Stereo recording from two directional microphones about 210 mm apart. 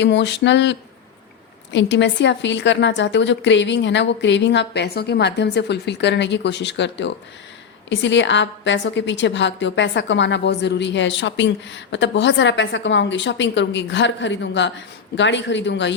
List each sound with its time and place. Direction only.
0.0 s a woman's voice: 55° left (ahead or behind)